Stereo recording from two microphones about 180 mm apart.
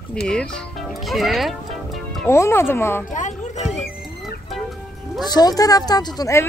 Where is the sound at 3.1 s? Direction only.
45° left (ahead or behind).